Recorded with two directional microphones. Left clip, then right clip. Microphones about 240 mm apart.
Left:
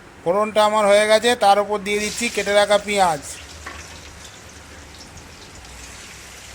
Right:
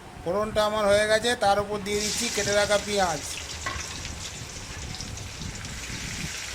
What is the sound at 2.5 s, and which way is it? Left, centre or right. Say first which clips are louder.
Speech: left 8 dB; centre.